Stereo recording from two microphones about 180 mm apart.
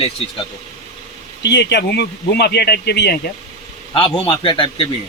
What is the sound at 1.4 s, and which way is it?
Speech, 70° left (ahead or behind).